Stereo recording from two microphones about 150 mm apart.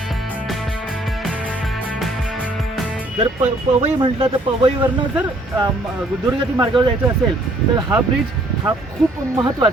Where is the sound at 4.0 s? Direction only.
30° right (ahead or behind).